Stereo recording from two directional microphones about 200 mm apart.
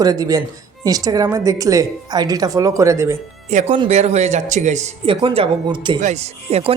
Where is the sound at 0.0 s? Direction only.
20° right (ahead or behind).